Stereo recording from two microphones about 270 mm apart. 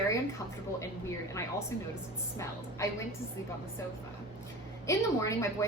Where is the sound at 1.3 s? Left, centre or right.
Centre.